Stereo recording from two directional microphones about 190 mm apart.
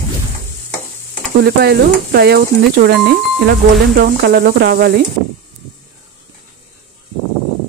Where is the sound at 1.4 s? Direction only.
55° right (ahead or behind).